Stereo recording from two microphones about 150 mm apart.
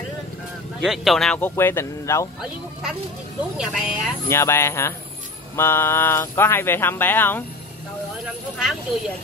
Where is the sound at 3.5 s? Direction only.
5° right (ahead or behind).